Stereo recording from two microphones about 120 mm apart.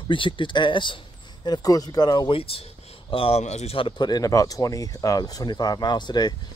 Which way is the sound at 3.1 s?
50° left (ahead or behind).